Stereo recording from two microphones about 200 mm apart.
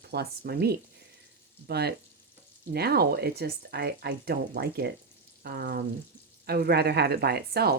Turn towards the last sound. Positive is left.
turn(degrees=-50)  # may be behind; listen again after turning